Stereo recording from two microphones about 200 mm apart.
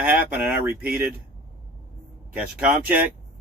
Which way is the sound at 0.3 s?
10° right (ahead or behind).